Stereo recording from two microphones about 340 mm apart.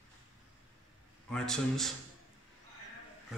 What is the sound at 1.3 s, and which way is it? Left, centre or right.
Speech, centre.